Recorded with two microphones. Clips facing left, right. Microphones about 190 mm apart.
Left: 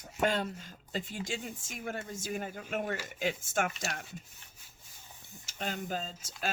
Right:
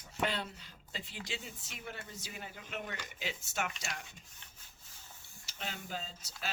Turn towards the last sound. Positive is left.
turn(degrees=45)  # may be behind; listen again after turning